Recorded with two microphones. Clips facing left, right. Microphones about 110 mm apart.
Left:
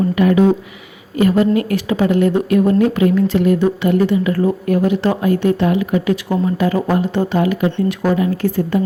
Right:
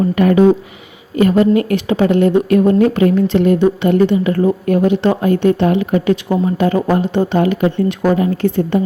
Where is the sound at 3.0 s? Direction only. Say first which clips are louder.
Right 2 dB; 45° right (ahead or behind).